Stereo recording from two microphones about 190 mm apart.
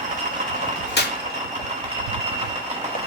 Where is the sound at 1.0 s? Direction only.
60° left (ahead or behind).